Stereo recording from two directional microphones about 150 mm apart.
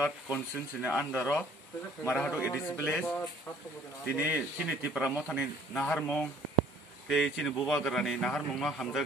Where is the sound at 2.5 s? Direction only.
15° left (ahead or behind).